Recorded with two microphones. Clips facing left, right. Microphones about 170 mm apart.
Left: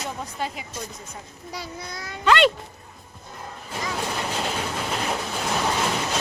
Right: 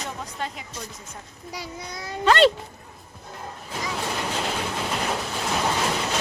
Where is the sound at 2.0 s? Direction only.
35° right (ahead or behind).